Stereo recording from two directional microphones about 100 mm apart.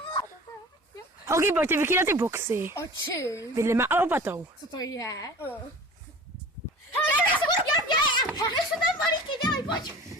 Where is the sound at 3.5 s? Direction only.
30° right (ahead or behind).